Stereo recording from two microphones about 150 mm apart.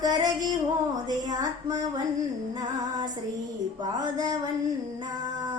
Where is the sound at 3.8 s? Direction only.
25° right (ahead or behind).